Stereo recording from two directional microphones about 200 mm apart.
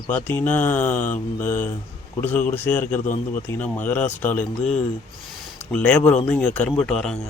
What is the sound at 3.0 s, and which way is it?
Speech, 40° left (ahead or behind).